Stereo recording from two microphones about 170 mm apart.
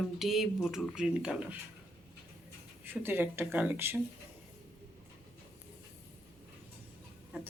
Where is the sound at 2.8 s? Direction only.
10° right (ahead or behind).